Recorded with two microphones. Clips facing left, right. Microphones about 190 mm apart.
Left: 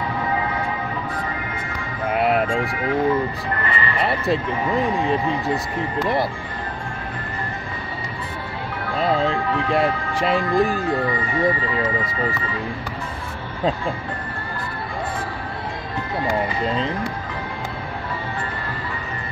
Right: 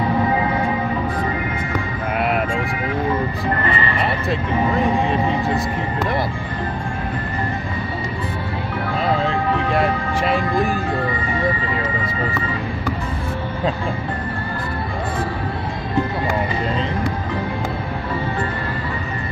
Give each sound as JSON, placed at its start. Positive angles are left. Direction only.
{"t": 2.1, "sound": "music", "side_deg": 30}
{"t": 3.6, "sound": "speech", "side_deg": -30}
{"t": 9.7, "sound": "speech", "side_deg": 30}